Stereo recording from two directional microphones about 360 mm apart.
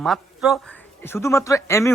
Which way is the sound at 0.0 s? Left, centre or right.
Centre.